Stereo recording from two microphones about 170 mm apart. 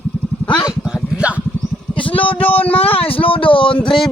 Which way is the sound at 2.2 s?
30° left (ahead or behind).